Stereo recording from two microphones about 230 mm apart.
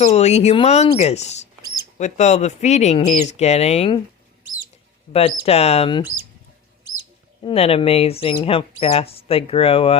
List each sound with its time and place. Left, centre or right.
0.0 s speech: left
5.1 s speech: left
7.4 s speech: left